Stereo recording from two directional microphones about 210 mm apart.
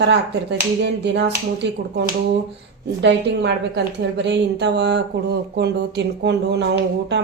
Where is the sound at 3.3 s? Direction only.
55° right (ahead or behind).